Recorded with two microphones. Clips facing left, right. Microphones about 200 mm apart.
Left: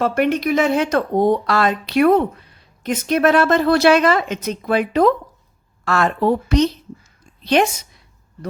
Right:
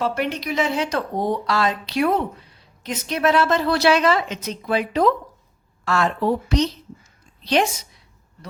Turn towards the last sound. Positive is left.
turn(degrees=55)  # may be behind; listen again after turning